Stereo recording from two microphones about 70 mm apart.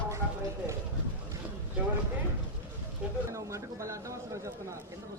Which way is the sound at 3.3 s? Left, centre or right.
Right.